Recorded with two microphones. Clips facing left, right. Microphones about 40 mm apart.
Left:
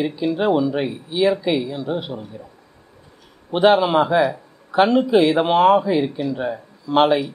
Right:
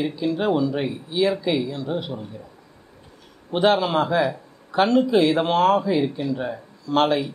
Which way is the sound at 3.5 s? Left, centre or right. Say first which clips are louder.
Left 4 dB; centre.